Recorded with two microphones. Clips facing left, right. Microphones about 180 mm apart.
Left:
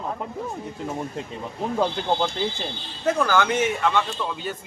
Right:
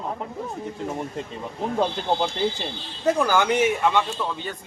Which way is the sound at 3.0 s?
15° right (ahead or behind).